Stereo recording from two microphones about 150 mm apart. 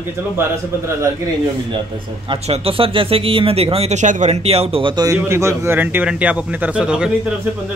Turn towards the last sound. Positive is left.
turn(degrees=-5)  # may be behind; listen again after turning